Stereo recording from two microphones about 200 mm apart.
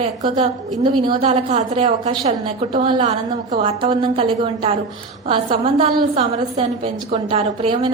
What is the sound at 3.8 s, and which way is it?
A woman's voice, 25° right (ahead or behind).